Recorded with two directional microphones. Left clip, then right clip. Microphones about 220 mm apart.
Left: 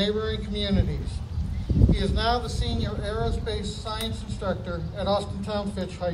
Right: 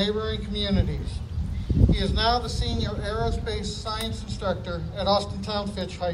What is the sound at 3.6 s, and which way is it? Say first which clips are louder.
Speech: right 1 dB; 45° right (ahead or behind).